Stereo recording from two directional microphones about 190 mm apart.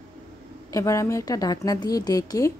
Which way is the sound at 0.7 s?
15° left (ahead or behind).